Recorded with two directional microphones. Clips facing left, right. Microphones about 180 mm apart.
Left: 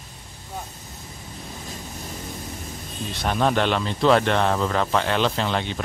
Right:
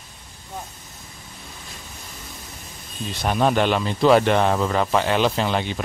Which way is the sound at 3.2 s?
10° right (ahead or behind).